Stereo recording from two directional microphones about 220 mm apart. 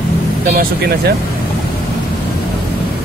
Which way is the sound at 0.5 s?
45° right (ahead or behind).